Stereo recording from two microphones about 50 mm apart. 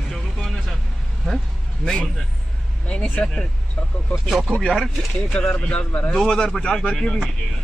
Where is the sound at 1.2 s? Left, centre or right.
Centre.